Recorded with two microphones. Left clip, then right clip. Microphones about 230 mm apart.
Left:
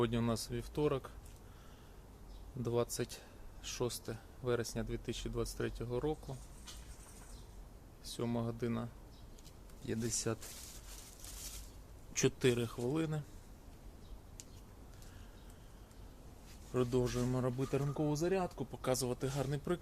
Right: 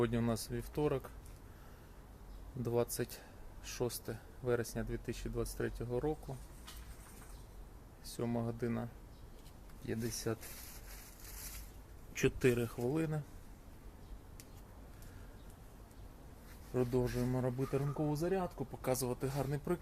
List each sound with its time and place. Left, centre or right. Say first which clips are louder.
0.0 s speech: even; centre
2.6 s speech: right 1 dB; centre
8.0 s speech: even; centre
9.9 s speech: left 1 dB; centre
12.4 s speech: right 1 dB; centre
16.7 s speech: left 1 dB; centre
18.8 s speech: left 1 dB; centre